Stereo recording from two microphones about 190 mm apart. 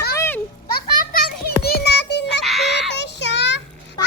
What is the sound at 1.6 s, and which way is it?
Music, 55° left (ahead or behind).